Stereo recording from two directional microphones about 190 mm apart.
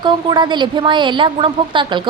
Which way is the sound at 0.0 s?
25° right (ahead or behind).